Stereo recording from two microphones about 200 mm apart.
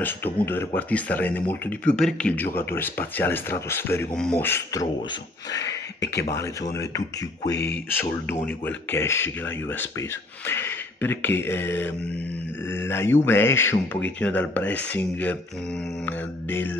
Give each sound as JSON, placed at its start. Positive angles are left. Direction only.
{"t": 0.0, "sound": "speech", "side_deg": 10}
{"t": 6.7, "sound": "speech", "side_deg": 15}